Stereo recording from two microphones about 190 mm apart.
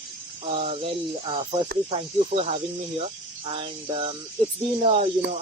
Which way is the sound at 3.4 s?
30° right (ahead or behind).